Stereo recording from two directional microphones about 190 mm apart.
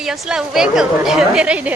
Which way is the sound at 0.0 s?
5° right (ahead or behind).